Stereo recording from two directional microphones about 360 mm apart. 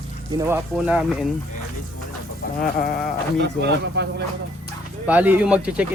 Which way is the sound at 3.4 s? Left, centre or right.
Right.